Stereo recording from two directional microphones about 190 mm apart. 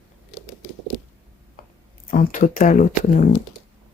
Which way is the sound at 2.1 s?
45° left (ahead or behind).